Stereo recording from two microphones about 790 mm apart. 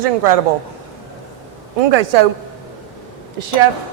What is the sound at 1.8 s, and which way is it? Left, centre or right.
Speech, right.